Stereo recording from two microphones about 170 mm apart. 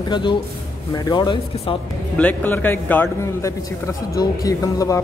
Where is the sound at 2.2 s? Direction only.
10° left (ahead or behind).